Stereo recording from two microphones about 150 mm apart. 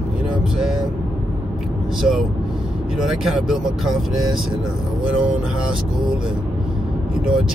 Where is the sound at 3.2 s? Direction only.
5° right (ahead or behind).